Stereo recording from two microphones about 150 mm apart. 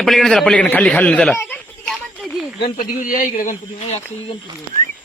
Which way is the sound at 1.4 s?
10° left (ahead or behind).